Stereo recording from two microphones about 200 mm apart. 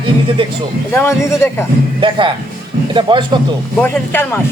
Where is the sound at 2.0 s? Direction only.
25° right (ahead or behind).